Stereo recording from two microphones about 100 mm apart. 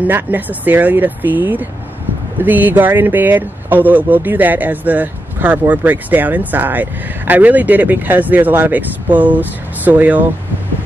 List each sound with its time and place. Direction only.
0.0 s speech: 15° right (ahead or behind)